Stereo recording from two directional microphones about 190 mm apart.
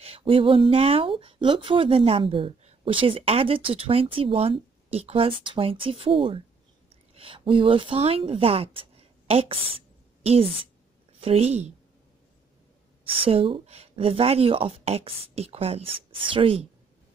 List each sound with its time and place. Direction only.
0.0 s a woman's voice: 30° right (ahead or behind)
13.0 s speech: 30° right (ahead or behind)